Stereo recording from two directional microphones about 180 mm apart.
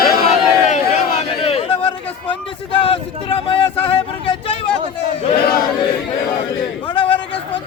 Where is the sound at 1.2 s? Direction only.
35° left (ahead or behind).